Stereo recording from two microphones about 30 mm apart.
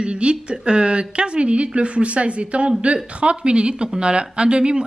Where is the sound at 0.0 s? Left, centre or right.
Right.